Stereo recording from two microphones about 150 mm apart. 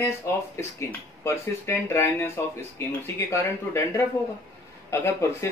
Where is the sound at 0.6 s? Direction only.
20° left (ahead or behind).